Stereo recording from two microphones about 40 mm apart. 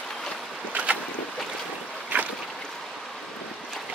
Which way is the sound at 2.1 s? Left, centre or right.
Right.